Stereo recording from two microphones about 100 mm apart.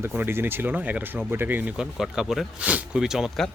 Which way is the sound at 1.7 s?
5° right (ahead or behind).